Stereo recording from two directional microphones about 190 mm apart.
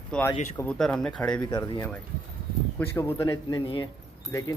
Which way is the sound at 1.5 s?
25° left (ahead or behind).